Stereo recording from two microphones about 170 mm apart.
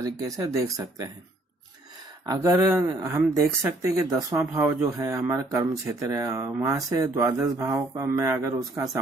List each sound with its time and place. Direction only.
0.0 s speech: 20° right (ahead or behind)
2.2 s speech: 15° right (ahead or behind)
2.8 s speech: 25° right (ahead or behind)